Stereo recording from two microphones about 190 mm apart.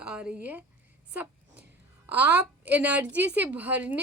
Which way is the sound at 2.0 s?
10° right (ahead or behind).